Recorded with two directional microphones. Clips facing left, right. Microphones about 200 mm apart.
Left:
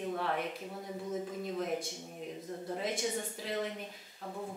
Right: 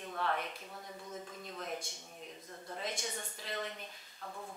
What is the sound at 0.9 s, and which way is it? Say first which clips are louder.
Speech: left 10 dB; 20° left (ahead or behind).